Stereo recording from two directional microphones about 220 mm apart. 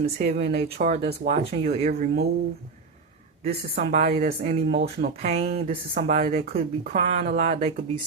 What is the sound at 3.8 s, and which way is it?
Speech, 30° right (ahead or behind).